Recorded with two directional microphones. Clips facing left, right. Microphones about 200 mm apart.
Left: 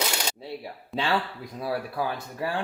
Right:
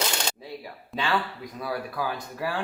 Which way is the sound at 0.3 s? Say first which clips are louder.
Left 2 dB; 30° left (ahead or behind).